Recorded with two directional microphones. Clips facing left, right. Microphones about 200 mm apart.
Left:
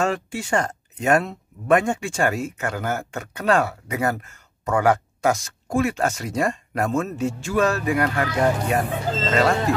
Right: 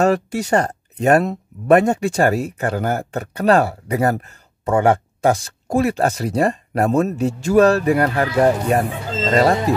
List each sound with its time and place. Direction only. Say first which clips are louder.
0.0 s speech: right 7 dB; 40° right (ahead or behind)